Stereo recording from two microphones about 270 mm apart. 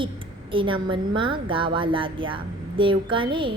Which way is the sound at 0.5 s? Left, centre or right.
Centre.